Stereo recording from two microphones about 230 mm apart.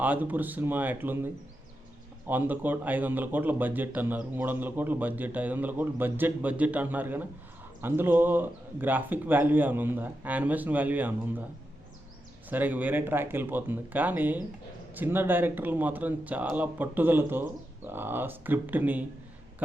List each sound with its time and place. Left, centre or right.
0.0 s a man's voice: centre
12.5 s a man's voice: centre